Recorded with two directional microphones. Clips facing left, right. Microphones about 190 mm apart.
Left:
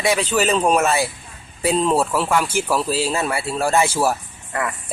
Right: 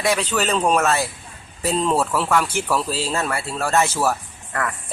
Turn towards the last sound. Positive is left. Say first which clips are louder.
# left 1 dB
turn(degrees=15)  # may be behind; listen again after turning